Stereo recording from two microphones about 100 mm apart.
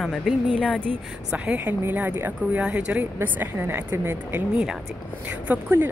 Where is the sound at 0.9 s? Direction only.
15° right (ahead or behind).